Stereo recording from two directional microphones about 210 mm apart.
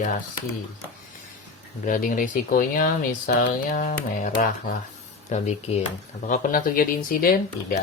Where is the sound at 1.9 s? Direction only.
40° left (ahead or behind).